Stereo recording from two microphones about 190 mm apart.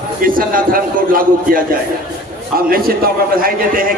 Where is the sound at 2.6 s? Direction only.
50° right (ahead or behind).